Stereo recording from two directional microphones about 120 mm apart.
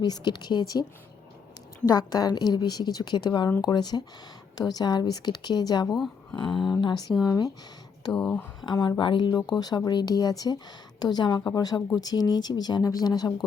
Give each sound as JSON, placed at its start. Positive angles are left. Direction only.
{"t": 0.0, "sound": "speech", "side_deg": 35}
{"t": 8.1, "sound": "speech", "side_deg": 10}
{"t": 8.6, "sound": "speech", "side_deg": 35}